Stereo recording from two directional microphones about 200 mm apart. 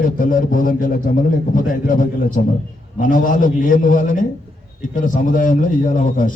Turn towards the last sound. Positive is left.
turn(degrees=40)  # may be behind; listen again after turning